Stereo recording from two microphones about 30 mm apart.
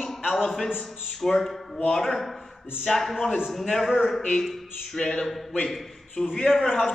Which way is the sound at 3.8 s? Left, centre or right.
Centre.